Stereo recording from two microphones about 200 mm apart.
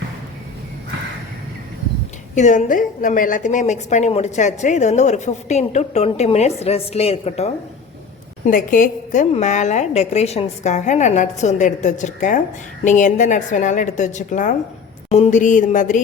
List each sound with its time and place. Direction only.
2.3 s a woman's voice: 35° left (ahead or behind)
8.4 s a woman's voice: 45° left (ahead or behind)